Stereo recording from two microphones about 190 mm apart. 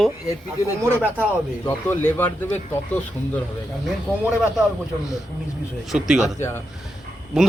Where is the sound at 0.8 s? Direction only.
10° right (ahead or behind).